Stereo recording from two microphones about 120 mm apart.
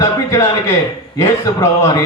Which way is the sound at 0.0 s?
25° left (ahead or behind).